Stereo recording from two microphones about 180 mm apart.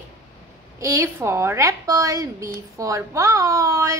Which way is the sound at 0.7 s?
15° right (ahead or behind).